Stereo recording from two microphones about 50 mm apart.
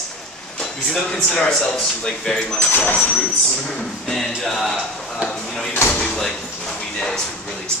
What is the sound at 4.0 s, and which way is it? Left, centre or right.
A man's voice, centre.